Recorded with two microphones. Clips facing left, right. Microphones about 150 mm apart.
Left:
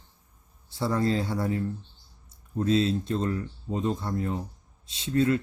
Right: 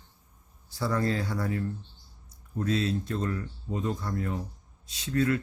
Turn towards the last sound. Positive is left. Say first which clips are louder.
# left 3 dB
turn(degrees=25)  # may be behind; listen again after turning